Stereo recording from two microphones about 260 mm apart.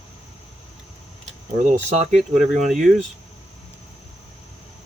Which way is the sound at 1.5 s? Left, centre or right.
Right.